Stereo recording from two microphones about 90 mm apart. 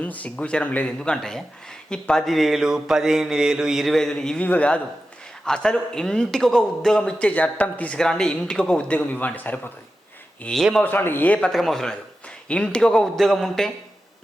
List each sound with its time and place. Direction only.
0.0 s a man's voice: 15° left (ahead or behind)
1.9 s mantra: 5° left (ahead or behind)
4.4 s a man's voice: 15° left (ahead or behind)
10.4 s mantra: centre (ahead or behind)
10.8 s a man's voice: 25° left (ahead or behind)
11.3 s mantra: 5° left (ahead or behind)